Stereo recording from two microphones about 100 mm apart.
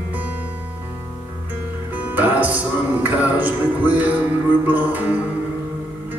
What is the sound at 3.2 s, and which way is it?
Speech, 15° right (ahead or behind).